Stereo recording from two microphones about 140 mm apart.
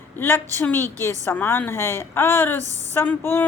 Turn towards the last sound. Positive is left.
turn(degrees=15)  # may be behind; listen again after turning